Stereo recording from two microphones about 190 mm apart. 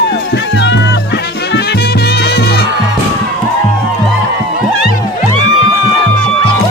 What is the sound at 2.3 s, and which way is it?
Music, 60° left (ahead or behind).